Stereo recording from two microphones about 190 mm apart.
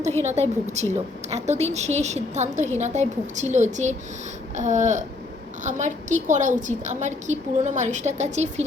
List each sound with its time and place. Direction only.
0.2 s a woman's voice: 35° right (ahead or behind)